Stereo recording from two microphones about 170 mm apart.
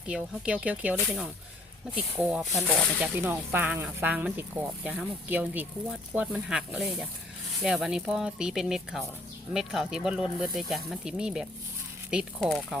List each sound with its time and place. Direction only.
0.0 s speech: 5° right (ahead or behind)
2.1 s speech: 5° right (ahead or behind)
3.0 s speech: 10° right (ahead or behind)